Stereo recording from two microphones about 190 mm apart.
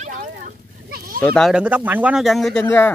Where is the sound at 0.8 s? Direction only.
50° right (ahead or behind).